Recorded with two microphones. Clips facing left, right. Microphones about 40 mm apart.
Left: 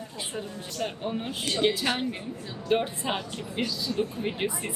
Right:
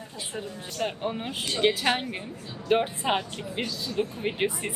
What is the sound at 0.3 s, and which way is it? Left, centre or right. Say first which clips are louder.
A woman's voice: right 2 dB; right.